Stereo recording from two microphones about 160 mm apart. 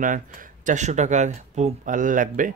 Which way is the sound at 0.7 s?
45° right (ahead or behind).